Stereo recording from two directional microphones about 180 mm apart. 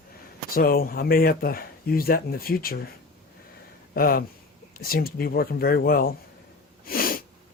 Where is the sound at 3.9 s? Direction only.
55° left (ahead or behind).